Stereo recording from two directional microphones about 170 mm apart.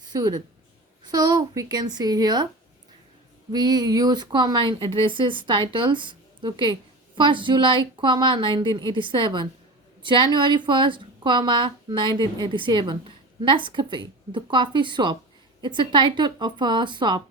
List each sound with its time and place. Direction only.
0.1 s a woman's voice: 25° right (ahead or behind)
3.5 s a woman's voice: 25° right (ahead or behind)